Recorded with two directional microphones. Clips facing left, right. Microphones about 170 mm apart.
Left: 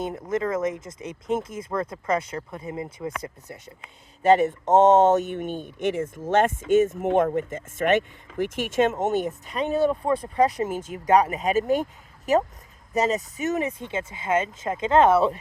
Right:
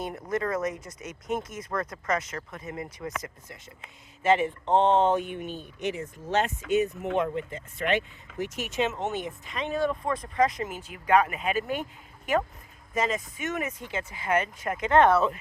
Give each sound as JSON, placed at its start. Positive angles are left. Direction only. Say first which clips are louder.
{"t": 0.3, "sound": "speech", "louder": "left 3 dB", "side_deg": 25}
{"t": 4.2, "sound": "speech", "louder": "left 5 dB", "side_deg": 40}